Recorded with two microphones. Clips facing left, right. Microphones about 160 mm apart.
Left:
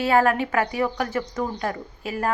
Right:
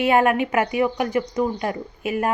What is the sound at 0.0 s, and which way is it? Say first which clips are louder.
A woman's voice: right 2 dB; 20° right (ahead or behind).